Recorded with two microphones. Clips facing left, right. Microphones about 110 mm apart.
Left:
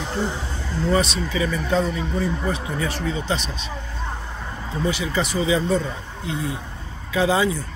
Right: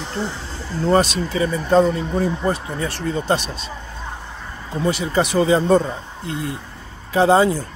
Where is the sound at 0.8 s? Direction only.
45° right (ahead or behind).